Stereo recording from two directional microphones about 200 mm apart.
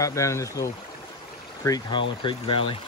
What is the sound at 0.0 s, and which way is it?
Speech, 15° left (ahead or behind).